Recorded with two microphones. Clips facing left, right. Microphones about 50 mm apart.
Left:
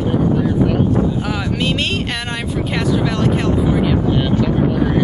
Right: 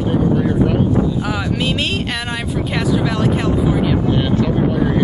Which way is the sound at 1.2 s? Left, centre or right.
Centre.